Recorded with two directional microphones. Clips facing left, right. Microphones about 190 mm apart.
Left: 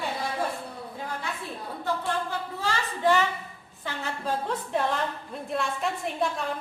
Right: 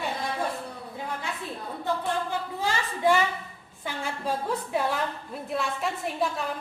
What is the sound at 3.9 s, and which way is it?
A woman's voice, 10° right (ahead or behind).